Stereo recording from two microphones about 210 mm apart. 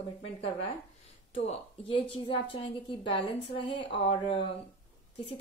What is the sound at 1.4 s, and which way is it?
A woman's voice, 25° left (ahead or behind).